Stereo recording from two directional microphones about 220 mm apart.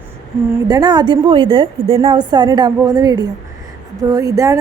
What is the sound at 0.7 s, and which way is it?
A woman's voice, 20° right (ahead or behind).